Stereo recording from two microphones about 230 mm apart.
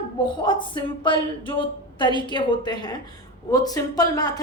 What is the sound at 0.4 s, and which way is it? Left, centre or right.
A woman's voice, left.